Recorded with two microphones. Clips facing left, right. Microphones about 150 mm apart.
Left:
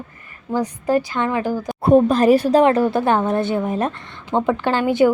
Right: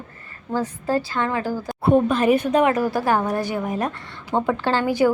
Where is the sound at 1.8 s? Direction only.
40° left (ahead or behind).